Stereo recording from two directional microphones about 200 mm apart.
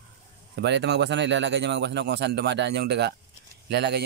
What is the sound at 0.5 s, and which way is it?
Speech, 60° right (ahead or behind).